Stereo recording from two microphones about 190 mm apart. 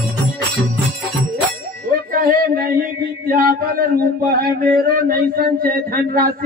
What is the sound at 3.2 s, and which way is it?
A man's voice, 50° right (ahead or behind).